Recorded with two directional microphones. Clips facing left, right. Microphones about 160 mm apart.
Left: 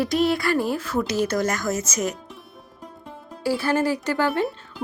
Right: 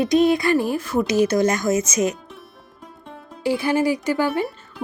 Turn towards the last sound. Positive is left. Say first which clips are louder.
# even
turn(degrees=0)  # may be behind; listen again after turning